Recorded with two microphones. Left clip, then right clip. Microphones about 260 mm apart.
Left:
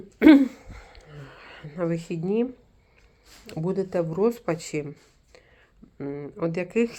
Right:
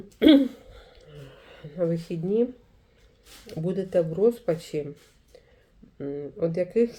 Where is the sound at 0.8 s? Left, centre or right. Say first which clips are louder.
Left 1 dB; left.